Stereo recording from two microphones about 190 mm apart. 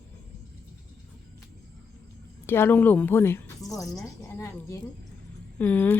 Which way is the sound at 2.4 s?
10° left (ahead or behind).